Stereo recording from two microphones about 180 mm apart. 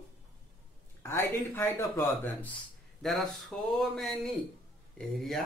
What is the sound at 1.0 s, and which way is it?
Speech, 15° left (ahead or behind).